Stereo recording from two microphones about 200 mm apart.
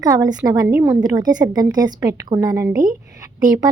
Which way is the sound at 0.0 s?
20° right (ahead or behind).